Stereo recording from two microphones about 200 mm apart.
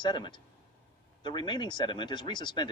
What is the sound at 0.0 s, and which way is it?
Speech, 25° left (ahead or behind).